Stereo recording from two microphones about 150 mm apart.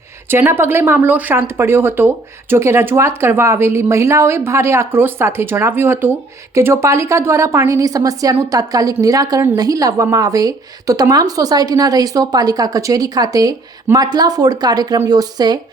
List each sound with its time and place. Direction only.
0.3 s a woman's voice: 15° right (ahead or behind)